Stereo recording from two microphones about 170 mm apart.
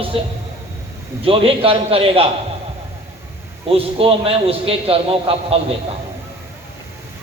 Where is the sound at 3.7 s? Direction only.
35° right (ahead or behind).